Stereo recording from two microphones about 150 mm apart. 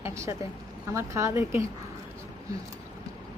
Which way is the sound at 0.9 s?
20° right (ahead or behind).